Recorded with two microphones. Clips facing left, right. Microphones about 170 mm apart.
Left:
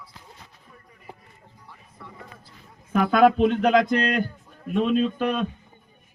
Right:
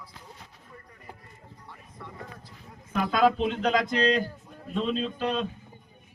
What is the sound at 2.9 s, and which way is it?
Speech, 60° left (ahead or behind).